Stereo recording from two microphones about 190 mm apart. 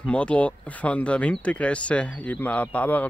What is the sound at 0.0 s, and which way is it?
Speech, 5° left (ahead or behind).